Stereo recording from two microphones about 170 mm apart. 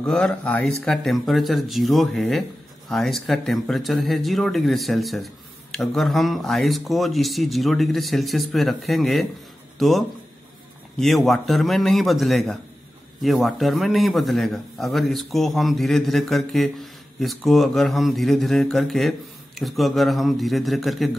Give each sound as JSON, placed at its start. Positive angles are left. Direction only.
{"t": 0.0, "sound": "a man's voice", "side_deg": 5}